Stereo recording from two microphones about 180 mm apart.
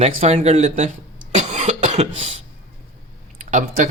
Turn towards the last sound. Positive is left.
turn(degrees=-45)  # may be behind; listen again after turning